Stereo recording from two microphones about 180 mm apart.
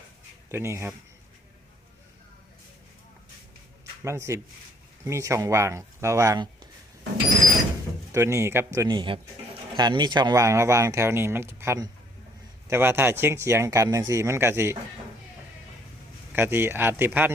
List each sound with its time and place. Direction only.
0.5 s speech: 15° right (ahead or behind)
4.0 s speech: 15° right (ahead or behind)
8.1 s speech: 15° right (ahead or behind)
16.3 s speech: 10° right (ahead or behind)